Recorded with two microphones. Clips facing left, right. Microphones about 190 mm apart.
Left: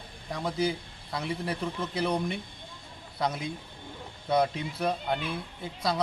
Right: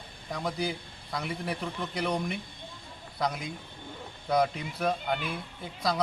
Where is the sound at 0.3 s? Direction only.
Centre (ahead or behind).